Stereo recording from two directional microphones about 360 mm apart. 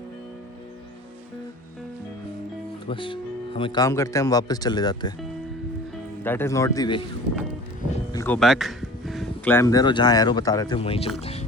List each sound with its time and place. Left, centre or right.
2.8 s speech: centre
6.2 s speech: centre
8.1 s speech: centre